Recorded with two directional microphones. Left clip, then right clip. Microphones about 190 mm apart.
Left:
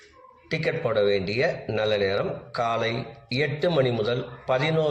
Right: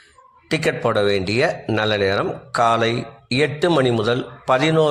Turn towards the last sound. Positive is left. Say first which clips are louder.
# right 7 dB
turn(degrees=-60)  # may be behind; listen again after turning